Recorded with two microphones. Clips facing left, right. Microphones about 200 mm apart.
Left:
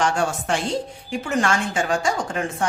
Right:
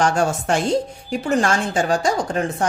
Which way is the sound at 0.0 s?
40° right (ahead or behind).